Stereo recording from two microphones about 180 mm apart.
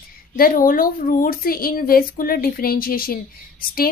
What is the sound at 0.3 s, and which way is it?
A woman's voice, 55° left (ahead or behind).